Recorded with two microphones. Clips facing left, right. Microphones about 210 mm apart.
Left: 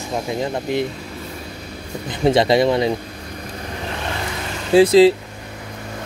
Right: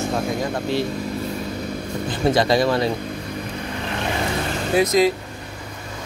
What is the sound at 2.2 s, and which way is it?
Speech, 25° left (ahead or behind).